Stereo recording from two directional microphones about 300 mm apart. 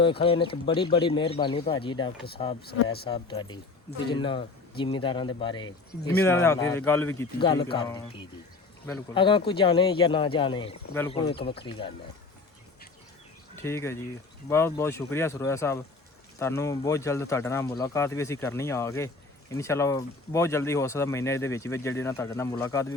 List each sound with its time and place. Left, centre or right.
0.0 s speech: centre
13.6 s speech: centre